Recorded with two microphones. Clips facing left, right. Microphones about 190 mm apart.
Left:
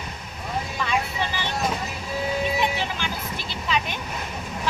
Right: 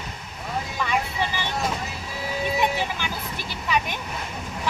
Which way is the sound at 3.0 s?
15° right (ahead or behind).